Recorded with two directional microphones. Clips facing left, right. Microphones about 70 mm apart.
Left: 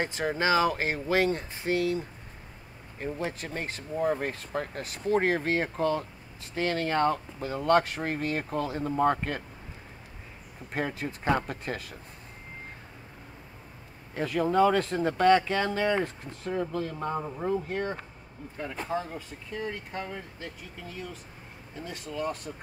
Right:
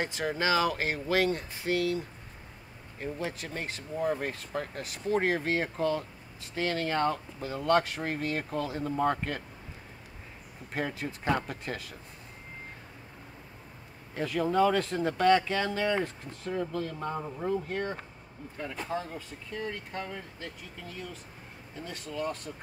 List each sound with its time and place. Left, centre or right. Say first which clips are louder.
0.0 s speech: left 2 dB; left
10.7 s speech: left 2 dB; left
14.2 s speech: left 2 dB; left
16.4 s speech: left 2 dB; left
18.9 s speech: left 2 dB; centre
21.8 s speech: left 1 dB; centre